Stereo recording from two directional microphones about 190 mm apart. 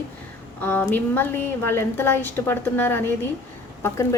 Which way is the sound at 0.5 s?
10° left (ahead or behind).